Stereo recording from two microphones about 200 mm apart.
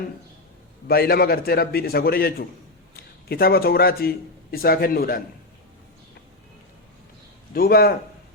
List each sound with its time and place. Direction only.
0.9 s a man's voice: 50° left (ahead or behind)
7.5 s a man's voice: 50° left (ahead or behind)